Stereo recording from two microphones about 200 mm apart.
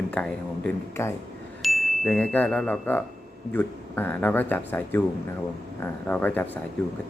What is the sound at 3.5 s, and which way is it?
A man's voice, 10° left (ahead or behind).